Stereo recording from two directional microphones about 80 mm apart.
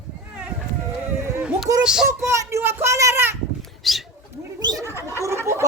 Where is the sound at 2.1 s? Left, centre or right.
Right.